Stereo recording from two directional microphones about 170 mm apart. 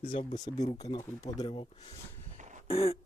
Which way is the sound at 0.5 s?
20° left (ahead or behind).